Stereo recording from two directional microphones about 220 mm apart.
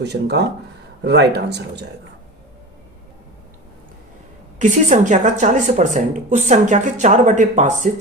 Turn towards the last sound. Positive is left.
turn(degrees=-35)  # may be behind; listen again after turning